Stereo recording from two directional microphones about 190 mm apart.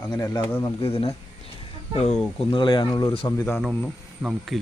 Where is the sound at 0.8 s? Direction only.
30° left (ahead or behind).